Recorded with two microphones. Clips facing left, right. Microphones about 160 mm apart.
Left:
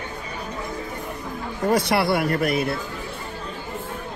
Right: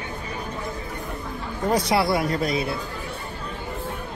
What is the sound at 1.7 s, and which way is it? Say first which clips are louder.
Speech: left 1 dB; 65° left (ahead or behind).